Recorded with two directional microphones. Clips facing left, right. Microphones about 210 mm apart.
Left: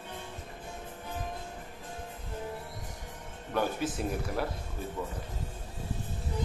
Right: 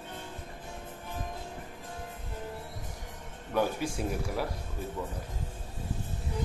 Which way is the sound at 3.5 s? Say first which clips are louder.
Right 1 dB; 10° right (ahead or behind).